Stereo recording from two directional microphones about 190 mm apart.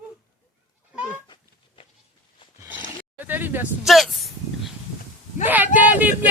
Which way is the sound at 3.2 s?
10° right (ahead or behind).